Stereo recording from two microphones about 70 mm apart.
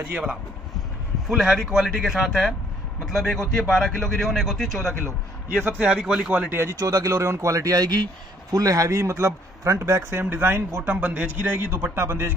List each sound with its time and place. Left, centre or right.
0.1 s a man's voice: centre
5.7 s a man's voice: centre
6.5 s speech: right
6.8 s a man's voice: right